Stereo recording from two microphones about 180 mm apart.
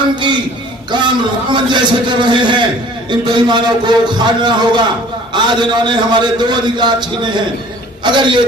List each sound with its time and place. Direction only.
0.9 s a man's voice: 25° right (ahead or behind)